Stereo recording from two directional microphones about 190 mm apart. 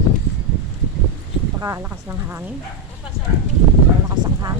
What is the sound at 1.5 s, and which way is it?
Speech, 15° right (ahead or behind).